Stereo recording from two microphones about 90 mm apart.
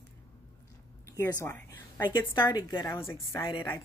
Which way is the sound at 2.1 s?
55° left (ahead or behind).